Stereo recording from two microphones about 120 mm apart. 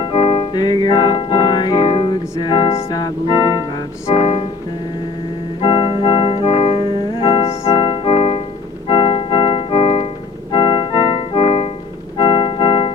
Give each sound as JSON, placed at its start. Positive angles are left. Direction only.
{"t": 0.0, "sound": "music", "side_deg": 45}
{"t": 5.6, "sound": "keyboard", "side_deg": 45}
{"t": 12.1, "sound": "organ", "side_deg": 40}